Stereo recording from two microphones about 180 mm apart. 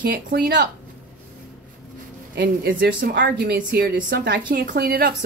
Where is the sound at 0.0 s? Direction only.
60° right (ahead or behind).